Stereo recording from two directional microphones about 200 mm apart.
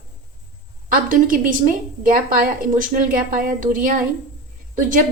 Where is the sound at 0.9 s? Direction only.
45° right (ahead or behind).